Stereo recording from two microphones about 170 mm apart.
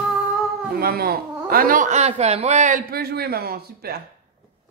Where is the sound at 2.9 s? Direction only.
65° right (ahead or behind).